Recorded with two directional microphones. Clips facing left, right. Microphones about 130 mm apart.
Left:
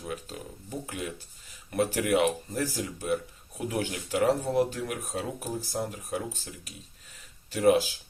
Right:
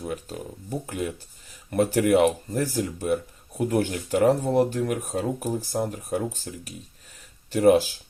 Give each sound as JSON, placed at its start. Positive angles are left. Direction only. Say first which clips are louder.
{"t": 0.0, "sound": "speech", "louder": "right 5 dB", "side_deg": -40}
{"t": 7.5, "sound": "speech", "louder": "right 4 dB", "side_deg": -45}